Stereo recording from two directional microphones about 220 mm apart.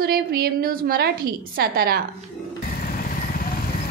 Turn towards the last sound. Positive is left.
turn(degrees=-45)  # may be behind; listen again after turning